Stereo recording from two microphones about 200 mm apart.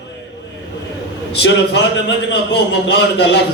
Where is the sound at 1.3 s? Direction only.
60° left (ahead or behind).